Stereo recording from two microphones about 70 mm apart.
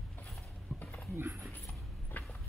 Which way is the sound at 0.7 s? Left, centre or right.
Centre.